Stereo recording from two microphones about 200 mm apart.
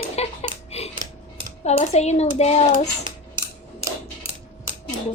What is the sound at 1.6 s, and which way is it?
Speech, 30° left (ahead or behind).